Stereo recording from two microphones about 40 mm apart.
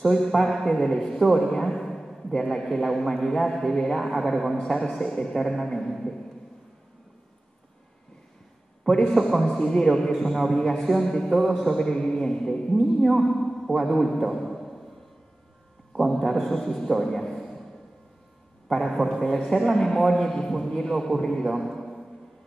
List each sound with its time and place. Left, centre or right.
0.0 s a man's voice: centre
8.8 s a man's voice: centre
9.3 s a man's voice: centre
15.9 s a man's voice: centre
18.7 s a man's voice: centre